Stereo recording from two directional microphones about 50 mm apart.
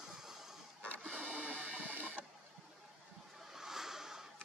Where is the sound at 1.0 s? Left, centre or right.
Right.